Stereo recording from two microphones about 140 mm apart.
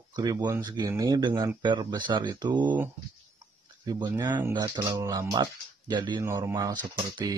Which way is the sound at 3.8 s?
25° right (ahead or behind).